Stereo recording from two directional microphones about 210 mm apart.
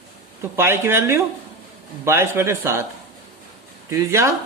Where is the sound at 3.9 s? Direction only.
15° right (ahead or behind).